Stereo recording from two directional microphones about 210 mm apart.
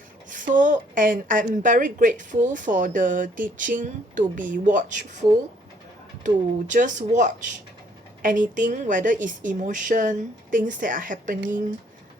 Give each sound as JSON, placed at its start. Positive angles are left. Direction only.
{"t": 0.3, "sound": "a woman's voice", "side_deg": -40}
{"t": 6.2, "sound": "a woman's voice", "side_deg": -35}